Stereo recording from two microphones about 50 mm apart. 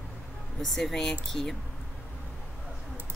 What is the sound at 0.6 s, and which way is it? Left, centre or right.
Speech, centre.